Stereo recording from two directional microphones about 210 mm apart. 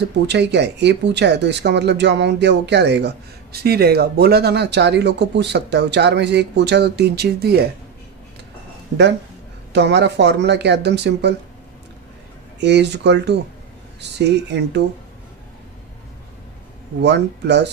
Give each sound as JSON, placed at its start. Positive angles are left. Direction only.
{"t": 0.3, "sound": "speech", "side_deg": -55}
{"t": 9.7, "sound": "speech", "side_deg": -55}
{"t": 12.5, "sound": "speech", "side_deg": -55}
{"t": 17.0, "sound": "speech", "side_deg": -55}